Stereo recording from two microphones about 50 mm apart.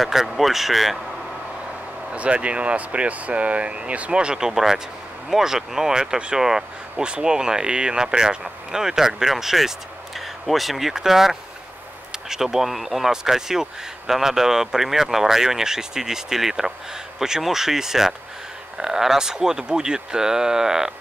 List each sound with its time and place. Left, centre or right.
0.0 s speech: centre
2.1 s speech: right; by 20.9 s centre